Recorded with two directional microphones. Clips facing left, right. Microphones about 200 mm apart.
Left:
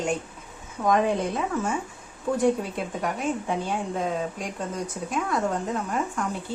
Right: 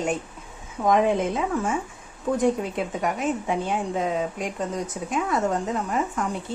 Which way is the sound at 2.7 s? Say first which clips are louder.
Right 3 dB; centre (ahead or behind).